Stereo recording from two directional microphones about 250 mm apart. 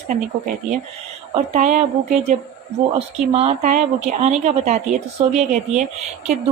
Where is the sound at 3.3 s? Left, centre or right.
Right.